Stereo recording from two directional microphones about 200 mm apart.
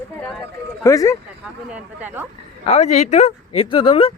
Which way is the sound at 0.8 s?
15° left (ahead or behind).